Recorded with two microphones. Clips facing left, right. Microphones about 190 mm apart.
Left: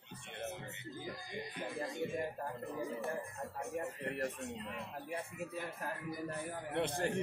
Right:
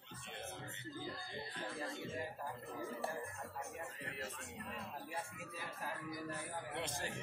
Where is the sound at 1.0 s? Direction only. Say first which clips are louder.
Left 3 dB; 15° left (ahead or behind).